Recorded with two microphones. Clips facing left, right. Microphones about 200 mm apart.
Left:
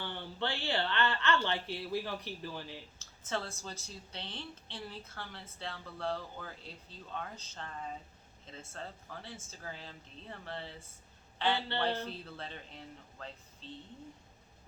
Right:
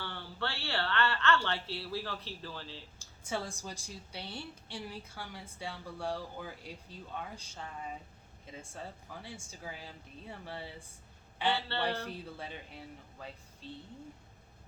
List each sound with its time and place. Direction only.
0.0 s speech: 20° left (ahead or behind)
3.0 s a woman's voice: 10° right (ahead or behind)